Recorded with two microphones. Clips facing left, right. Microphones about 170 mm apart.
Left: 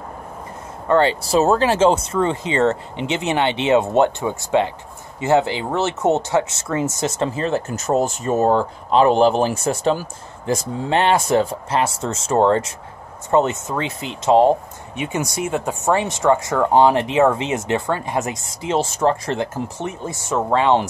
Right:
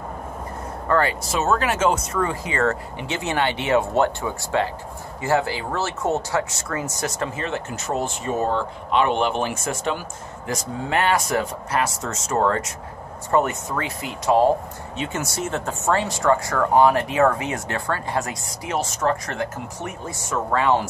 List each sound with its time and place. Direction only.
0.8 s speech: 25° left (ahead or behind)